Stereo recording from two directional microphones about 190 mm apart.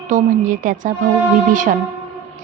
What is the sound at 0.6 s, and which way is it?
Speech, 45° right (ahead or behind).